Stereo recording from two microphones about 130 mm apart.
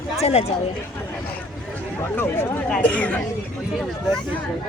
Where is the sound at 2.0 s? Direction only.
20° left (ahead or behind).